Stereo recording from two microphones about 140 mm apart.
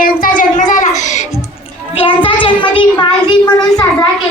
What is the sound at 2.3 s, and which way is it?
Child singing, 35° left (ahead or behind).